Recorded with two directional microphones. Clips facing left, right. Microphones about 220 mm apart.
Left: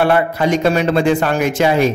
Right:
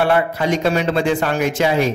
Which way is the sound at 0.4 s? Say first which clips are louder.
Left 3 dB; 50° left (ahead or behind).